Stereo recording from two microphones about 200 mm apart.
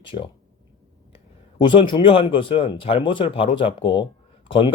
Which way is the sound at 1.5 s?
25° left (ahead or behind).